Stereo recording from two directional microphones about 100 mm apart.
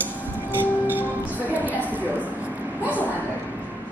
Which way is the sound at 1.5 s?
15° right (ahead or behind).